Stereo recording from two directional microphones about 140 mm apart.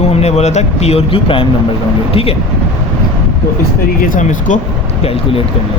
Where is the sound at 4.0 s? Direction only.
65° left (ahead or behind).